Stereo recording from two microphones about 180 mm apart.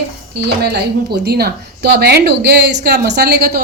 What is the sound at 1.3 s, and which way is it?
A woman's voice, 60° right (ahead or behind).